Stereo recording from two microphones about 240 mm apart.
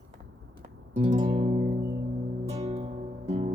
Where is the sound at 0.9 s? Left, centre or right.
Right.